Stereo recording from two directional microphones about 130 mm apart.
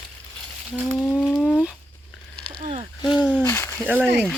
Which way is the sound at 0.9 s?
15° left (ahead or behind).